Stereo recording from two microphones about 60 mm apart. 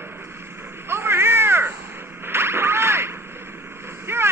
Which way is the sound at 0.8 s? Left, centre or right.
Right.